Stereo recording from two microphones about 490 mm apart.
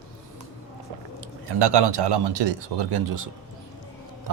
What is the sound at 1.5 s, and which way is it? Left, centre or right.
A man's voice, right.